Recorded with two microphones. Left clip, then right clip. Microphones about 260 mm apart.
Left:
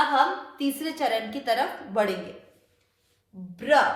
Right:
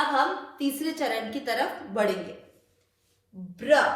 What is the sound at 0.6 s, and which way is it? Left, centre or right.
A woman's voice, left.